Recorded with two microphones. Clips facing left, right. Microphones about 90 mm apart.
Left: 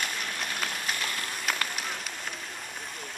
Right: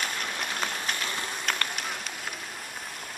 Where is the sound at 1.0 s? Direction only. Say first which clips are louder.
Right 1 dB; 20° right (ahead or behind).